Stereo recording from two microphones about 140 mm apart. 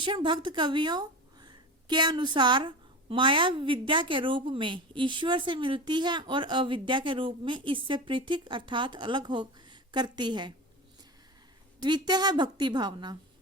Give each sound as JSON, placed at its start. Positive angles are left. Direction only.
{"t": 0.0, "sound": "speech", "side_deg": -35}
{"t": 11.8, "sound": "speech", "side_deg": -30}